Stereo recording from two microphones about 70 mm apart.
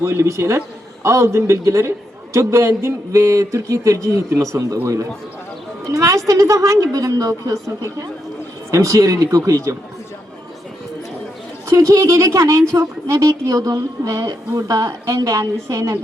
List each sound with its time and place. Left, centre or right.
0.0 s a woman's voice: right
5.9 s a woman's voice: right
11.7 s a woman's voice: right